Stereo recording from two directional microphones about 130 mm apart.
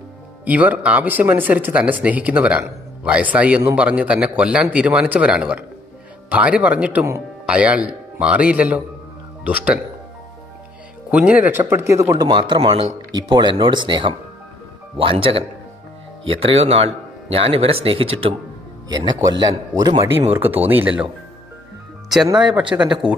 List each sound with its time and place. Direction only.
0.5 s a man's voice: 10° right (ahead or behind)
11.1 s a man's voice: 10° right (ahead or behind); by 18.3 s 50° right (ahead or behind)
18.9 s speech: 30° right (ahead or behind)
20.1 s a man's voice: 15° right (ahead or behind)
22.5 s a man's voice: 10° right (ahead or behind)